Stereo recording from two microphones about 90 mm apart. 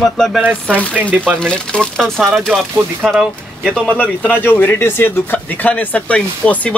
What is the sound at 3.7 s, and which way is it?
A man's voice, 15° left (ahead or behind).